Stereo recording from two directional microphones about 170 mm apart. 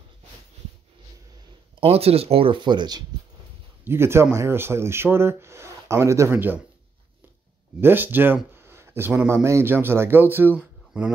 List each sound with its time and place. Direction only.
1.8 s speech: 35° right (ahead or behind)
3.8 s speech: 15° right (ahead or behind)
7.8 s speech: 10° right (ahead or behind)